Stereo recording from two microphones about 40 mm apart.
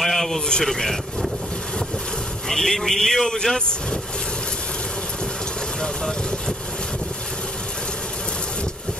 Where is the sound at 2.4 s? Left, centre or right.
Centre.